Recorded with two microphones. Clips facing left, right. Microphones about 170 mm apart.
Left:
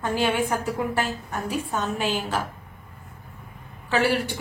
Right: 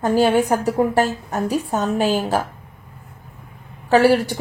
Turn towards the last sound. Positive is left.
turn(degrees=-40)  # may be behind; listen again after turning